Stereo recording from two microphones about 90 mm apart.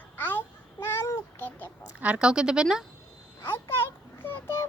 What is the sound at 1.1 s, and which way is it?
Speech, 25° left (ahead or behind).